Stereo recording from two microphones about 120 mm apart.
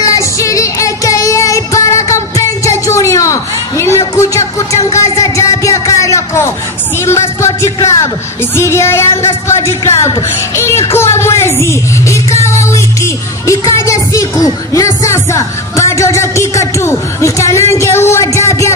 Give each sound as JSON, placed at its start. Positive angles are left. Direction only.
{"t": 0.0, "sound": "music", "side_deg": 30}
{"t": 7.1, "sound": "a woman's voice", "side_deg": 25}